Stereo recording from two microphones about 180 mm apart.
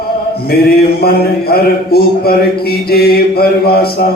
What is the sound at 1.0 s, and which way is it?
A man's voice, 60° left (ahead or behind).